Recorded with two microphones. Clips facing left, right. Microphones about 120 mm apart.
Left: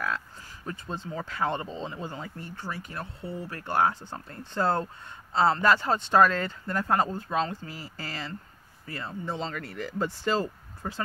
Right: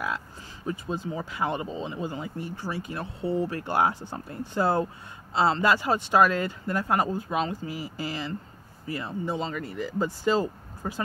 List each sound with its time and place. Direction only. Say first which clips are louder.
0.7 s speech: right 5 dB; 10° right (ahead or behind)